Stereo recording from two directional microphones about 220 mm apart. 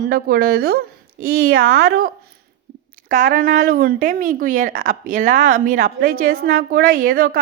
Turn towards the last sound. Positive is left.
turn(degrees=-40)  # may be behind; listen again after turning